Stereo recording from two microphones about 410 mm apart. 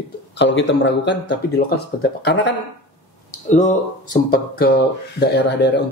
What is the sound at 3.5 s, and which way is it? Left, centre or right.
Speech, centre.